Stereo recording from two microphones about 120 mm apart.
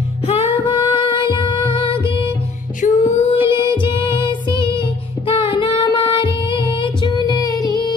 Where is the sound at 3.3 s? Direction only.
45° left (ahead or behind).